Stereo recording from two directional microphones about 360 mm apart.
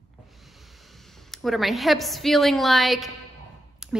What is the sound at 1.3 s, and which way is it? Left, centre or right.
A woman's voice, centre.